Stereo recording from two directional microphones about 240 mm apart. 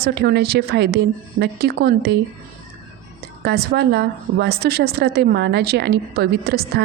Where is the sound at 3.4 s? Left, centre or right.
Right.